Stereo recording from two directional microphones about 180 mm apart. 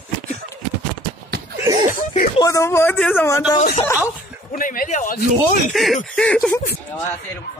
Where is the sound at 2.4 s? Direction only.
15° left (ahead or behind).